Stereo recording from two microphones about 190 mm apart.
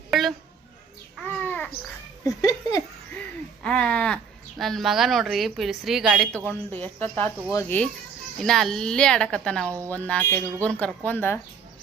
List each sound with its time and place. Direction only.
0.1 s a woman's voice: centre (ahead or behind)
1.5 s a sound: 10° left (ahead or behind)
2.2 s speech: 20° left (ahead or behind)
3.6 s speech: 5° left (ahead or behind)